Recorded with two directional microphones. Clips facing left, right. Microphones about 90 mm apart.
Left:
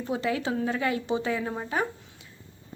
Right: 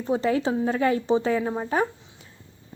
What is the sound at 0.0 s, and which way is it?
A woman's voice, 30° right (ahead or behind).